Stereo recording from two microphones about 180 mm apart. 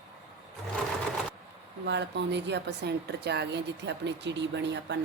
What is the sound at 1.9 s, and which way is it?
A woman's voice, 75° right (ahead or behind).